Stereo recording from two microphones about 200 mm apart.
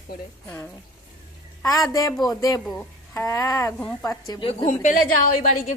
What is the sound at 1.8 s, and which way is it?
A woman's voice, 20° left (ahead or behind).